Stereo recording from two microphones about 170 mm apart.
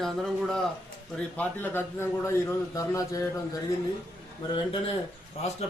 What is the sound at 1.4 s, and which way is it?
A man's voice, 15° left (ahead or behind).